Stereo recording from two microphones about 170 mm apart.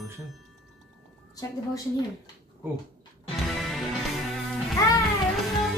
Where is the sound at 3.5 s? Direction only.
Centre (ahead or behind).